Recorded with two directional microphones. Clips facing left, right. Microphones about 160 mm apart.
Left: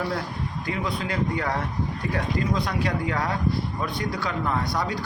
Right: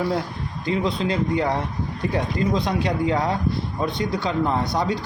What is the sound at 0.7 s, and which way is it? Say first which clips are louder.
Speech: right 7 dB; 25° right (ahead or behind).